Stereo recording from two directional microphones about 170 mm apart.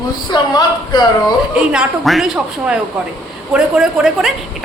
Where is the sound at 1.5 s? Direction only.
5° right (ahead or behind).